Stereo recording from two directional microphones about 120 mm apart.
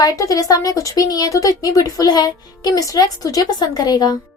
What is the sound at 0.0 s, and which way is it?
Speech, 30° left (ahead or behind).